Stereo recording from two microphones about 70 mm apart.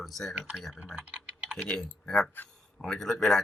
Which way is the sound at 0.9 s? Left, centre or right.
Centre.